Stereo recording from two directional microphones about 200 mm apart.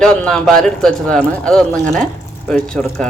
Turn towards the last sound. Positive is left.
turn(degrees=5)  # may be behind; listen again after turning